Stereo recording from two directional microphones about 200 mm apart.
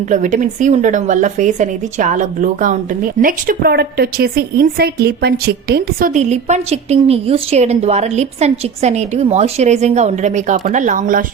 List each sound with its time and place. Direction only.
0.0 s a woman's voice: 40° right (ahead or behind)